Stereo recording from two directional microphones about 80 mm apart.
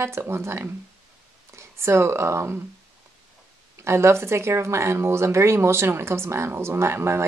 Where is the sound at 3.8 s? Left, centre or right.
Right.